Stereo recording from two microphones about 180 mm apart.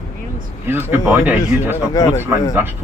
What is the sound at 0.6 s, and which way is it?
Speech, 10° right (ahead or behind).